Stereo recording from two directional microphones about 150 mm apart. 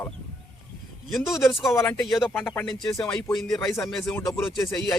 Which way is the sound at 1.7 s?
15° left (ahead or behind).